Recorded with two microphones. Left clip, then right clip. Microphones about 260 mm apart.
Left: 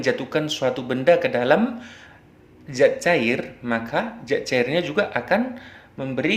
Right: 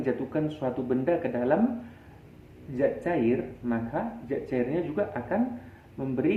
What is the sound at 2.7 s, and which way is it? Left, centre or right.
A man's voice, left.